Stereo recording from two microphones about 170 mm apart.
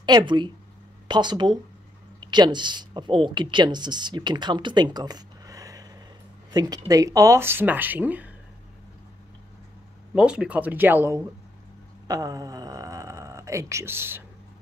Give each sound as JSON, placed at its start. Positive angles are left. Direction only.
{"t": 0.0, "sound": "speech", "side_deg": -25}
{"t": 10.1, "sound": "speech", "side_deg": -5}
{"t": 12.1, "sound": "a sound", "side_deg": -20}